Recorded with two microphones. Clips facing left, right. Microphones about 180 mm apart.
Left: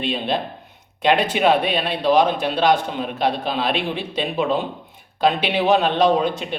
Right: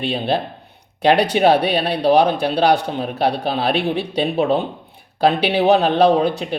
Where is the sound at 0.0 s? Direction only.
35° right (ahead or behind).